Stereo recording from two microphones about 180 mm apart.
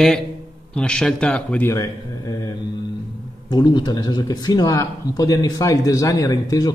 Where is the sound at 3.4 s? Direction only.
25° left (ahead or behind).